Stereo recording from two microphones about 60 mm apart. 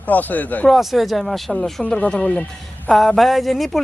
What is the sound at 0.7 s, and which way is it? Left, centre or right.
Speech, centre.